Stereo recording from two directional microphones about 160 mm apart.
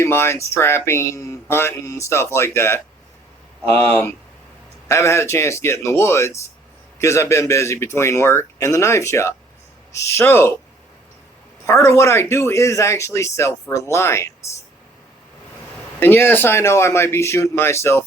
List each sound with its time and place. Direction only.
0.0 s speech: 15° left (ahead or behind)
4.9 s speech: 15° left (ahead or behind)
11.6 s speech: 20° left (ahead or behind)
16.0 s speech: 15° left (ahead or behind)